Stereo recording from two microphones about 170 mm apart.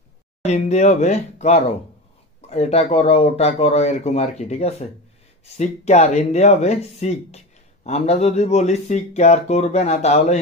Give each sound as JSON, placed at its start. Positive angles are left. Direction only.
{"t": 0.4, "sound": "speech", "side_deg": 40}